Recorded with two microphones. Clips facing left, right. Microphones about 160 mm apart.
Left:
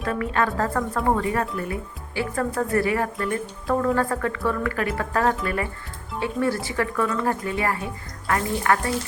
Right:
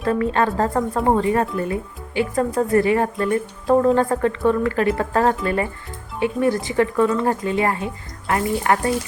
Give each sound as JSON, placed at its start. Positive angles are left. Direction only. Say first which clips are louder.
{"t": 0.0, "sound": "speech", "louder": "right 5 dB", "side_deg": -30}